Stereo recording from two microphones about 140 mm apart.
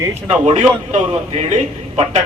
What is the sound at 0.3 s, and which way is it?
A man's voice, 55° right (ahead or behind).